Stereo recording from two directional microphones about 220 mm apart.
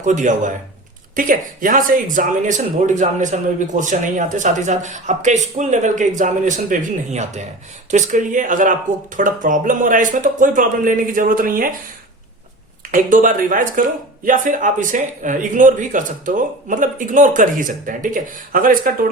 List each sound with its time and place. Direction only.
0.0 s speech: 35° right (ahead or behind)
12.9 s speech: 35° right (ahead or behind)